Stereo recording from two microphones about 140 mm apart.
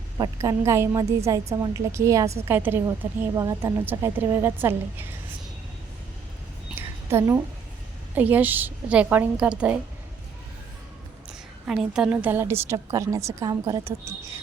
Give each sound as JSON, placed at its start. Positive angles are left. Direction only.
{"t": 0.2, "sound": "a woman's voice", "side_deg": -20}
{"t": 6.7, "sound": "a sound", "side_deg": -20}
{"t": 8.1, "sound": "a woman's voice", "side_deg": -10}
{"t": 11.6, "sound": "a woman's voice", "side_deg": -5}